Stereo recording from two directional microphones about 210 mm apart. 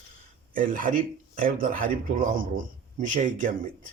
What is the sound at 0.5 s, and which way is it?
A man's voice, 40° right (ahead or behind).